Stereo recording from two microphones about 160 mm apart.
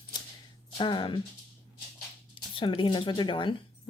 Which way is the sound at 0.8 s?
30° left (ahead or behind).